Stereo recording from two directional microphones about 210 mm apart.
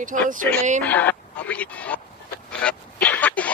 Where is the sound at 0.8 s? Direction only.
5° left (ahead or behind).